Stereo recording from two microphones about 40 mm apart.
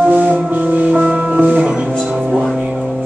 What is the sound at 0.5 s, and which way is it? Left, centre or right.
Music, right.